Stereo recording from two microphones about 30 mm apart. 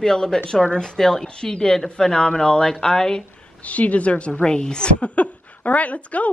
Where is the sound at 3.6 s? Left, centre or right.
Left.